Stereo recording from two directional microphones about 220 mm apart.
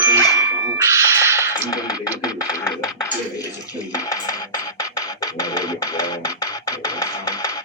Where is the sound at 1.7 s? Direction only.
15° left (ahead or behind).